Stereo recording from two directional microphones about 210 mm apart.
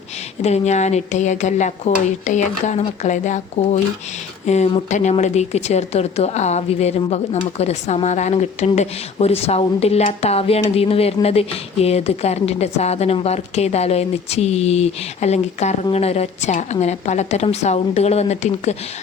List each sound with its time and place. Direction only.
0.4 s a woman's voice: 30° left (ahead or behind)